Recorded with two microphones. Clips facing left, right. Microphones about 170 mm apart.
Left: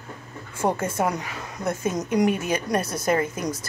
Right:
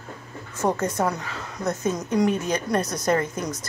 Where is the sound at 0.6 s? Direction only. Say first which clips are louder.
Even; 20° left (ahead or behind).